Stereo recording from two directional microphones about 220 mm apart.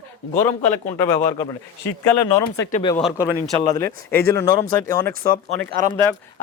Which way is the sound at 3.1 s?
15° left (ahead or behind).